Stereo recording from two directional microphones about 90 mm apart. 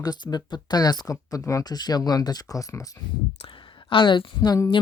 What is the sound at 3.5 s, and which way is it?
A woman's voice, 70° left (ahead or behind).